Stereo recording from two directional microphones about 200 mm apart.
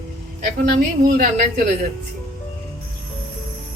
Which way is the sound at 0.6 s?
50° right (ahead or behind).